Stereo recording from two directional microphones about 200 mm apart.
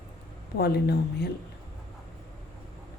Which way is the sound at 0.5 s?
50° left (ahead or behind).